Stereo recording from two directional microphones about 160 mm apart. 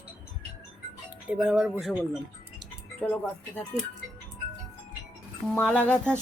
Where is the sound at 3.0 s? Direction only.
10° left (ahead or behind).